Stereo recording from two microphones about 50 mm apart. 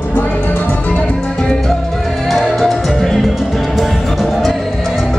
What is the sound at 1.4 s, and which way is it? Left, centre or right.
Music, centre.